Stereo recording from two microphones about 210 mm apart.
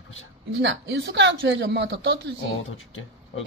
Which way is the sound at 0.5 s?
60° right (ahead or behind).